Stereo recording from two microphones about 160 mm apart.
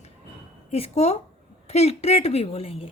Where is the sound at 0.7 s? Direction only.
40° left (ahead or behind).